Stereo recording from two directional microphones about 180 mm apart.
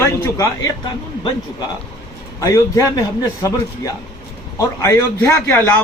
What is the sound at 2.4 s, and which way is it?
A man's voice, 20° left (ahead or behind).